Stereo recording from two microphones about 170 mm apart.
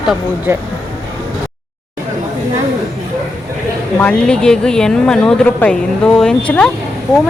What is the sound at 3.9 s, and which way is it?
A woman's voice, 5° left (ahead or behind).